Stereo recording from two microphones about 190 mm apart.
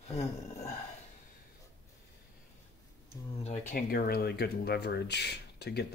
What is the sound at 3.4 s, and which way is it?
Speech, 45° left (ahead or behind).